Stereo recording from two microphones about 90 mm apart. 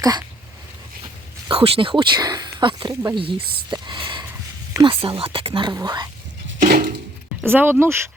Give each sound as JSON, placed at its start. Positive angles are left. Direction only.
{"t": 0.0, "sound": "a sound", "side_deg": -50}
{"t": 1.5, "sound": "speech", "side_deg": -90}
{"t": 2.9, "sound": "speech", "side_deg": -35}
{"t": 3.2, "sound": "speech", "side_deg": -70}
{"t": 4.8, "sound": "speech", "side_deg": -80}
{"t": 5.7, "sound": "speech", "side_deg": -50}
{"t": 7.4, "sound": "speech", "side_deg": -25}